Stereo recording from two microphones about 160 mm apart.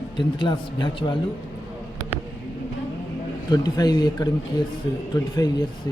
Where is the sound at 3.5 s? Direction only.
25° left (ahead or behind).